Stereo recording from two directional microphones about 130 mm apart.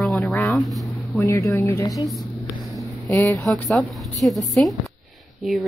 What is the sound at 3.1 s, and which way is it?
Speech, 20° left (ahead or behind).